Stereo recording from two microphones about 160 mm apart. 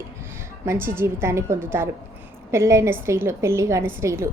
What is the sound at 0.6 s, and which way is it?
A woman's voice, 15° right (ahead or behind).